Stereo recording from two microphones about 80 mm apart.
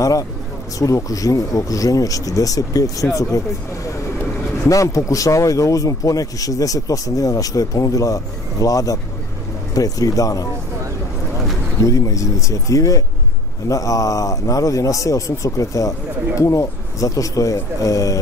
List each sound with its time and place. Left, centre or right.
0.0 s speech: left
4.6 s speech: left
11.8 s speech: left